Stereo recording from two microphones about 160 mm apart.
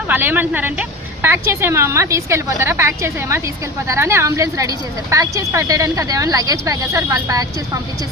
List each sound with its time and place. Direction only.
0.1 s a woman's voice: 10° right (ahead or behind)